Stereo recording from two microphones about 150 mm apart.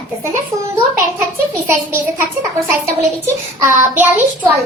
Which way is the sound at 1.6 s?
15° right (ahead or behind).